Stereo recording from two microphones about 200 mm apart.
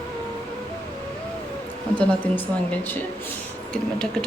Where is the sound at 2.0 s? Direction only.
5° left (ahead or behind).